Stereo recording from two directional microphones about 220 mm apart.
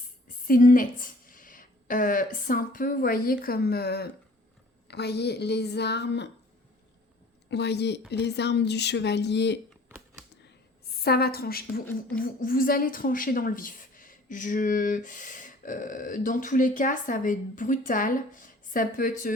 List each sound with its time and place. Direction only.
0.4 s a woman's voice: 40° left (ahead or behind)
7.5 s speech: 50° left (ahead or behind)
10.9 s a woman's voice: 45° left (ahead or behind)